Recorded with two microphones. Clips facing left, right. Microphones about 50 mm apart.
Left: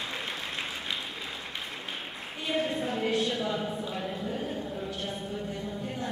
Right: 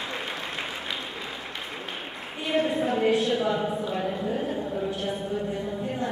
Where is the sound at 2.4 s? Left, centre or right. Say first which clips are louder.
Right 5 dB; centre.